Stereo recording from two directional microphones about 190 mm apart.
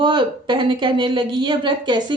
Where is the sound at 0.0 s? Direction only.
25° right (ahead or behind).